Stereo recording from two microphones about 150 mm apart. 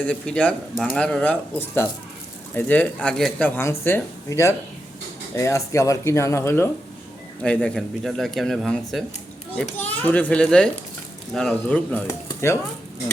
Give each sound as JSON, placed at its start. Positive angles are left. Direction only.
{"t": 0.0, "sound": "speech", "side_deg": 10}